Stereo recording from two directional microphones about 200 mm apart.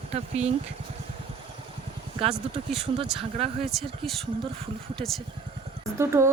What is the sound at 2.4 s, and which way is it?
Speech, 30° right (ahead or behind).